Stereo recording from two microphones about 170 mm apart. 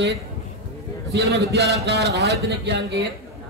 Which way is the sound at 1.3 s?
75° right (ahead or behind).